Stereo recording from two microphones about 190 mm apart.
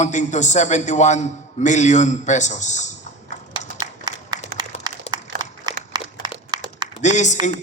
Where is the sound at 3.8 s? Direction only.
20° right (ahead or behind).